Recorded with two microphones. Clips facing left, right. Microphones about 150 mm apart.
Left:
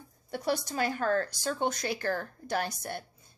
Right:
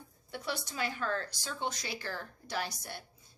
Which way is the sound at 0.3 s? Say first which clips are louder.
Left 8 dB; 45° left (ahead or behind).